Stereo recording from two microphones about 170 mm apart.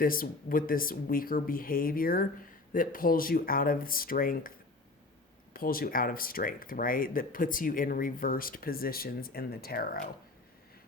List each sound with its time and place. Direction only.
0.0 s speech: 55° left (ahead or behind)
5.5 s speech: 55° left (ahead or behind)